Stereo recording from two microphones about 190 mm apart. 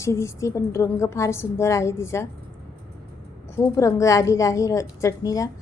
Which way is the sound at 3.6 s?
15° left (ahead or behind).